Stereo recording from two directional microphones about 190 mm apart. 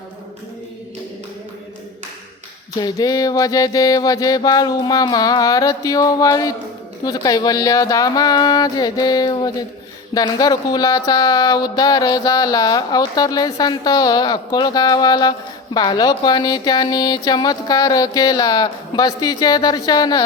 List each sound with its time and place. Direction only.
2.8 s speech: 20° left (ahead or behind)